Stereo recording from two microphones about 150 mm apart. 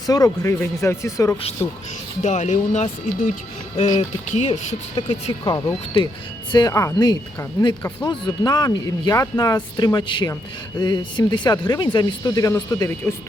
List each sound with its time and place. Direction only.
0.1 s speech: 20° left (ahead or behind)
2.2 s speech: 50° left (ahead or behind)
5.5 s speech: 25° left (ahead or behind)